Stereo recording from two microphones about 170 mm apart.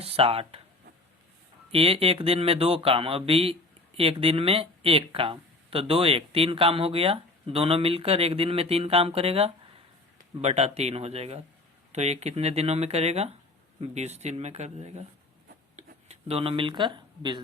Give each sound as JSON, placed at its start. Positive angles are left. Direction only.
{"t": 0.0, "sound": "speech", "side_deg": -35}
{"t": 1.7, "sound": "speech", "side_deg": -35}
{"t": 15.7, "sound": "a sound", "side_deg": -40}